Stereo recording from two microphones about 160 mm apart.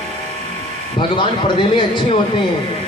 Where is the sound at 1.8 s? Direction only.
30° left (ahead or behind).